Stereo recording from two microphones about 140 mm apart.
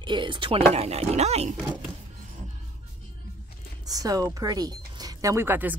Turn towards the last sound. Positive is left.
turn(degrees=-15)  # may be behind; listen again after turning